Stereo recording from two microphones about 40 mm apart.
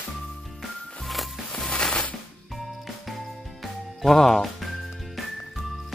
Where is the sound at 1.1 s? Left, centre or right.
Centre.